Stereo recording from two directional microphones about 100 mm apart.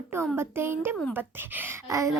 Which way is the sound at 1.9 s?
30° right (ahead or behind).